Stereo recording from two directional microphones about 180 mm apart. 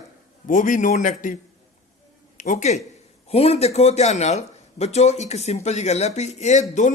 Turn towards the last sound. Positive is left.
turn(degrees=40)  # may be behind; listen again after turning